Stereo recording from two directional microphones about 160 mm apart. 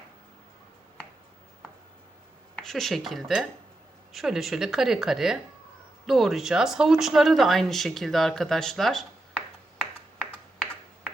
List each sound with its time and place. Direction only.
2.6 s speech: centre (ahead or behind)